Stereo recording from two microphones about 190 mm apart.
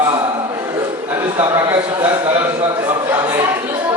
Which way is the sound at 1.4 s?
20° right (ahead or behind).